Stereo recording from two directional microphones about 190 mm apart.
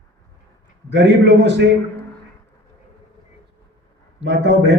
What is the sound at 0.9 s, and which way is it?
Speech, 65° right (ahead or behind).